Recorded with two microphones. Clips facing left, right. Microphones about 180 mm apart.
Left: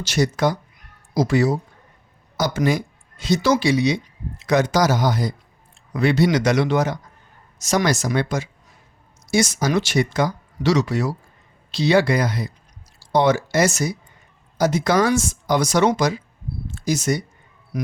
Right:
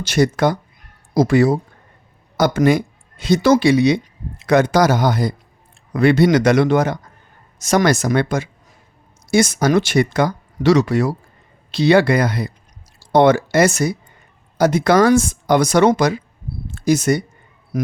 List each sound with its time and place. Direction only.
0.0 s speech: 55° right (ahead or behind)